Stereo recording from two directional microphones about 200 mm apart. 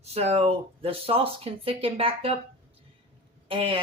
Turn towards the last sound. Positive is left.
turn(degrees=-25)  # may be behind; listen again after turning